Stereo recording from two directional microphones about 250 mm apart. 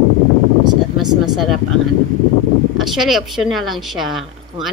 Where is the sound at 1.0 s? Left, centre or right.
Centre.